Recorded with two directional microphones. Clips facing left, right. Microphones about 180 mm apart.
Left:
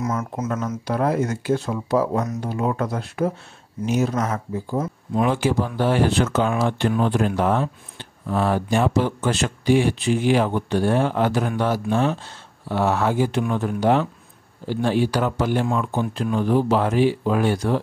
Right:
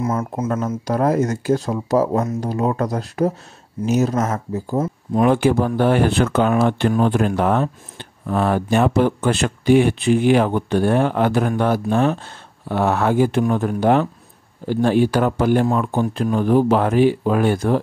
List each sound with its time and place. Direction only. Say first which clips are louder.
0.0 s speech: right 3 dB; 30° right (ahead or behind)
0.8 s speech: right 3 dB; 40° right (ahead or behind)
13.4 s speech: right 4 dB; 45° right (ahead or behind)